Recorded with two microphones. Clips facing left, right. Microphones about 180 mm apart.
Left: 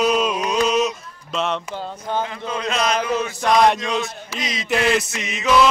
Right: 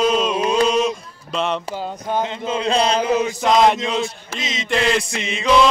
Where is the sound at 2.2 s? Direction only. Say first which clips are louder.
Right 4 dB; 25° right (ahead or behind).